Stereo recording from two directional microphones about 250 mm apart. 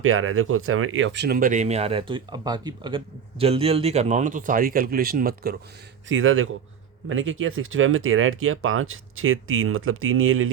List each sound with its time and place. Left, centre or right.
0.0 s speech: right
6.1 s speech: right